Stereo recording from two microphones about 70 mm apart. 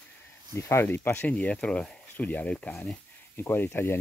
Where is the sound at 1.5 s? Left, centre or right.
Centre.